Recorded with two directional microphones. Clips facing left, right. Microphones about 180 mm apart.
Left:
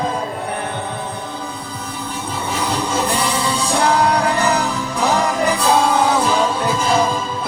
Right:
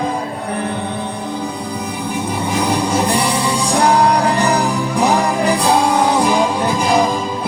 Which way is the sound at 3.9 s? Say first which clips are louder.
Right 3 dB; 35° right (ahead or behind).